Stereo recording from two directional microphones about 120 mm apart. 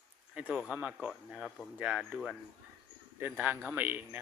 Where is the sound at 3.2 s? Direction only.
15° right (ahead or behind).